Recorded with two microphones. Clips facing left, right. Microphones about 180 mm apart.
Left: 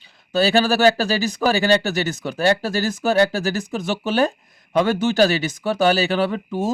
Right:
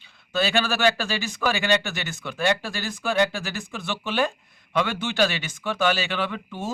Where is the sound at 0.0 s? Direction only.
35° left (ahead or behind).